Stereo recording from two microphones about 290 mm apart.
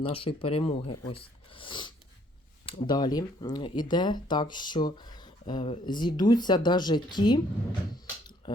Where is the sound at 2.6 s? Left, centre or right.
Centre.